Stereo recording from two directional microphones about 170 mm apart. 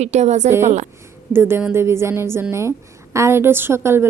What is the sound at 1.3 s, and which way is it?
A woman's voice, 15° right (ahead or behind).